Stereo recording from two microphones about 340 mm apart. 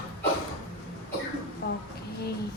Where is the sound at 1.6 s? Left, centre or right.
Left.